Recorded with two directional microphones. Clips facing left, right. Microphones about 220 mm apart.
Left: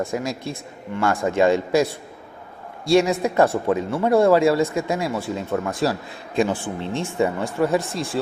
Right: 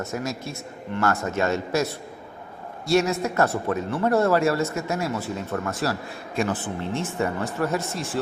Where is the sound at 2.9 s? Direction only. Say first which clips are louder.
Left 4 dB; 15° left (ahead or behind).